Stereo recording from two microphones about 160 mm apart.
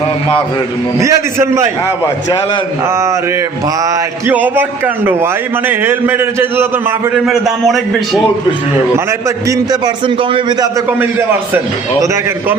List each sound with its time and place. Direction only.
0.9 s a man's voice: 20° right (ahead or behind)
2.8 s a man's voice: 20° right (ahead or behind)
4.4 s a man's voice: 10° right (ahead or behind)
7.3 s a man's voice: centre (ahead or behind)
9.2 s a man's voice: 25° right (ahead or behind)
10.8 s a man's voice: 15° right (ahead or behind)